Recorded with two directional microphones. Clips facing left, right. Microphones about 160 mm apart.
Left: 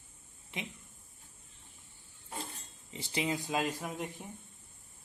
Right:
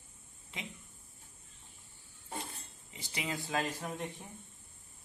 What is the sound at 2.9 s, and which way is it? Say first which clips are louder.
Speech: left 5 dB; 30° left (ahead or behind).